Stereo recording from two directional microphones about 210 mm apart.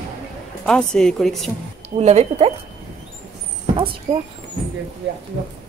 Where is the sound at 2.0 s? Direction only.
30° right (ahead or behind).